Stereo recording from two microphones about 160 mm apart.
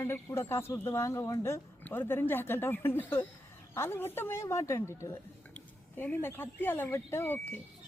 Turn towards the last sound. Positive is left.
turn(degrees=15)  # may be behind; listen again after turning